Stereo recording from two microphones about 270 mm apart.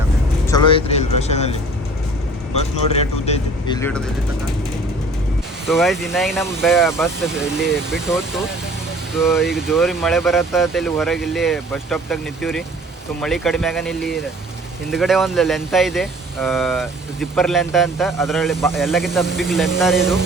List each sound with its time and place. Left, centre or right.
0.4 s speech: centre
3.2 s speech: left
3.8 s speech: centre
5.6 s speech: centre